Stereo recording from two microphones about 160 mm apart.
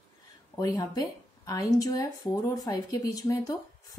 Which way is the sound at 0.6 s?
20° left (ahead or behind).